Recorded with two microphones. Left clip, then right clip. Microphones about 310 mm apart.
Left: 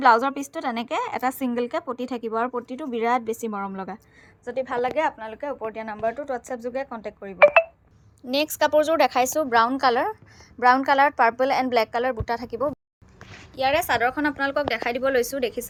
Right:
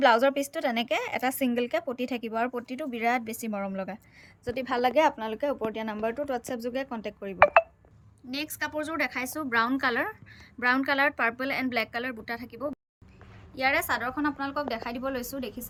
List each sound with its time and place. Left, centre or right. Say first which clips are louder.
0.0 s a woman's voice: left 3 dB; centre
8.3 s a woman's voice: left 12 dB; centre
11.3 s a woman's voice: left 9 dB; centre
13.6 s a woman's voice: left 5 dB; centre